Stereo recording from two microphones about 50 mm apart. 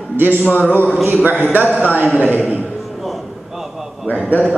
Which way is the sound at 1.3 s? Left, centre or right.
Right.